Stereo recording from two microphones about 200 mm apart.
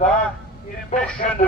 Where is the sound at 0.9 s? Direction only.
30° left (ahead or behind).